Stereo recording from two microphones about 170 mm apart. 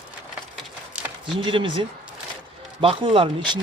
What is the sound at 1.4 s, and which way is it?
Speech, 30° right (ahead or behind).